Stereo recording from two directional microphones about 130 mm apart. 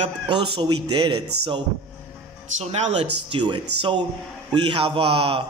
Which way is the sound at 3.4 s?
40° right (ahead or behind).